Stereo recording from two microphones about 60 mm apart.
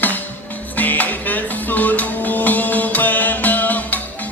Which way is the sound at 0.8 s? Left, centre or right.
Left.